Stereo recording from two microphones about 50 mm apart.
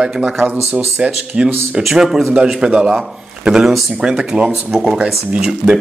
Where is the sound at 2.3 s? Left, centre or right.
Right.